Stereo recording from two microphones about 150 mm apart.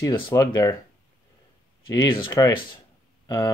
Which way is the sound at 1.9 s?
30° left (ahead or behind).